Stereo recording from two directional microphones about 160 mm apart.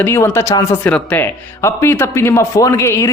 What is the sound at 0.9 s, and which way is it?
Speech, 10° left (ahead or behind).